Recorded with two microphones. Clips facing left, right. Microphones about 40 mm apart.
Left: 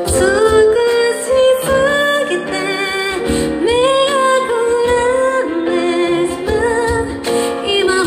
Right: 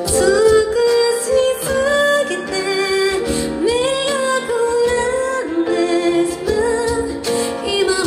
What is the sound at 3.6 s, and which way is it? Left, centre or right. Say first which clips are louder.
Music: left 5 dB; left.